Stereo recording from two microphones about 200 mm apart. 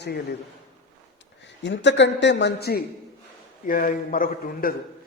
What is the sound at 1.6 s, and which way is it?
A man's voice, 65° left (ahead or behind).